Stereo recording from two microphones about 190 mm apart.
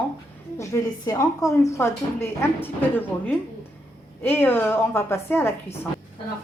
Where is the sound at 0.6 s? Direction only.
20° left (ahead or behind).